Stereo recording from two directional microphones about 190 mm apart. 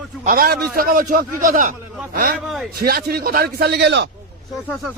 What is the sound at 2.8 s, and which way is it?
A man's voice, 55° right (ahead or behind).